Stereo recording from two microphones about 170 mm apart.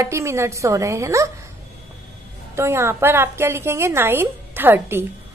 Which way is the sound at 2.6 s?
15° right (ahead or behind).